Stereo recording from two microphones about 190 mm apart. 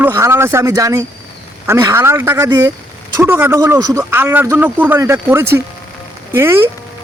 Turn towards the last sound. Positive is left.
turn(degrees=-10)  # may be behind; listen again after turning